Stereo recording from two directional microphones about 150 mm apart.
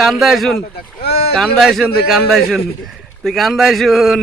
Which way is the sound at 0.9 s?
90° left.